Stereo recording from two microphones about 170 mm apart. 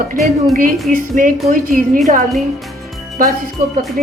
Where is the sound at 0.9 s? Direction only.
50° right (ahead or behind).